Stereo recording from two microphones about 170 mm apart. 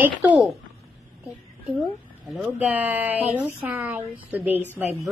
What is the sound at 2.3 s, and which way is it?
A woman's voice, 10° right (ahead or behind).